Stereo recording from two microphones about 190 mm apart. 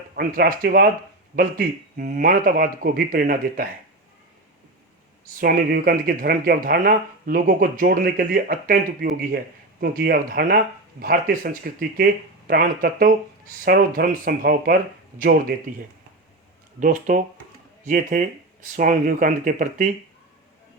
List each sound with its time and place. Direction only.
0.2 s speech: 50° right (ahead or behind)
5.4 s speech: 50° right (ahead or behind)
16.8 s speech: 45° right (ahead or behind)